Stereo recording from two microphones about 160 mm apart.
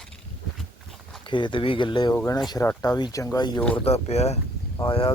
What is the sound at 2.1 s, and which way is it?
Speech, 20° left (ahead or behind).